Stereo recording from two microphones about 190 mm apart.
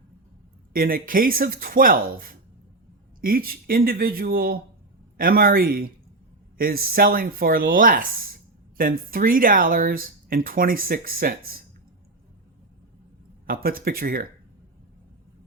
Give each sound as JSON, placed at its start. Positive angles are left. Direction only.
{"t": 0.7, "sound": "speech", "side_deg": -50}
{"t": 13.5, "sound": "speech", "side_deg": -50}